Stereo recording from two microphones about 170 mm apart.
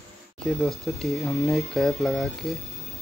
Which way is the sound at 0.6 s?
Centre (ahead or behind).